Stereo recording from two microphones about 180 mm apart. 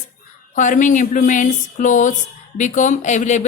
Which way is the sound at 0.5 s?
45° left (ahead or behind).